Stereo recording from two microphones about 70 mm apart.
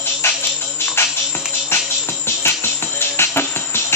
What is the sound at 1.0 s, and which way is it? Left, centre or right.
Music, left.